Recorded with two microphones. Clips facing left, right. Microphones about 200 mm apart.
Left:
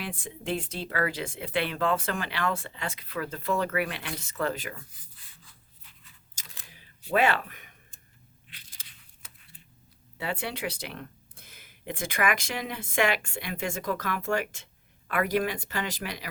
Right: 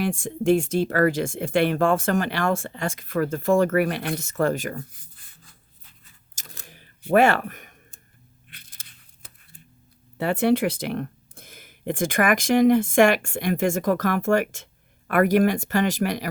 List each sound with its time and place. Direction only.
0.0 s speech: 45° right (ahead or behind)
6.3 s camera: 45° right (ahead or behind)
8.4 s a sound: 55° right (ahead or behind)
10.2 s speech: 50° right (ahead or behind)